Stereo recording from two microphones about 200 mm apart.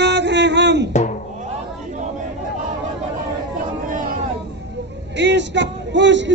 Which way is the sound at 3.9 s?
40° right (ahead or behind).